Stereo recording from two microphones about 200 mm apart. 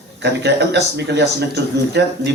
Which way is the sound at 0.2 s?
60° right (ahead or behind).